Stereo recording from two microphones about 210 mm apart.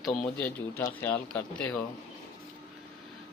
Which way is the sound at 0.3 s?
10° left (ahead or behind).